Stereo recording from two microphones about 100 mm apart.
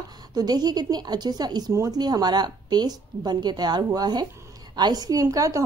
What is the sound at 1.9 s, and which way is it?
A woman's voice, 45° right (ahead or behind).